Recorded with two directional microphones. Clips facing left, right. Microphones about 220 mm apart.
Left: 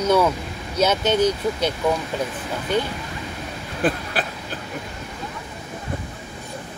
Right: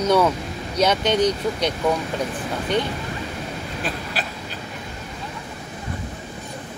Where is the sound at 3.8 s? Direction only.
55° left (ahead or behind).